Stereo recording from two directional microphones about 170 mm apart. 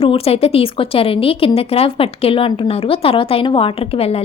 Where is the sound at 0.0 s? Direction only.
35° left (ahead or behind).